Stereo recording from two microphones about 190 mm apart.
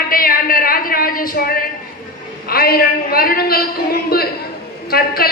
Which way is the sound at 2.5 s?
55° left (ahead or behind).